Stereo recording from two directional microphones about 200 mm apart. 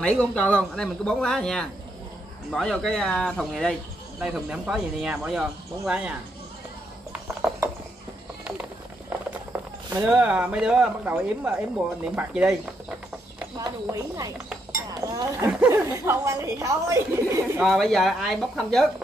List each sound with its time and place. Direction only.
0.0 s speech: 5° left (ahead or behind)
7.1 s a sound: 5° right (ahead or behind)
10.0 s speech: 5° right (ahead or behind)
13.6 s a woman's voice: 15° right (ahead or behind)
17.6 s speech: centre (ahead or behind)